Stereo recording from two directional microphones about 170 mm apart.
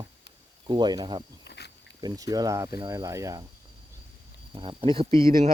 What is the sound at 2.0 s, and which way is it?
Speech, 25° right (ahead or behind).